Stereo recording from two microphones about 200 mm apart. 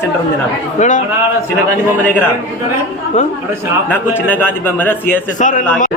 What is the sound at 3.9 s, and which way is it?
A man's voice, 10° left (ahead or behind).